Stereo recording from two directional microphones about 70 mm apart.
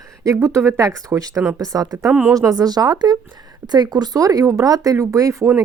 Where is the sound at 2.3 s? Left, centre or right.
Right.